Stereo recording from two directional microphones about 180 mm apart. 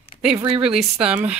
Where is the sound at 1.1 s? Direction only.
5° right (ahead or behind).